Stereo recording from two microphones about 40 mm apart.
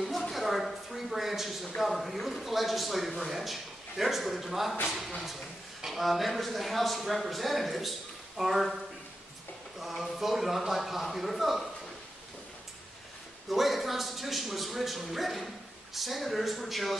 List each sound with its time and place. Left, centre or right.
0.3 s a sound: centre
1.8 s speech: centre
9.8 s speech: centre
13.5 s speech: centre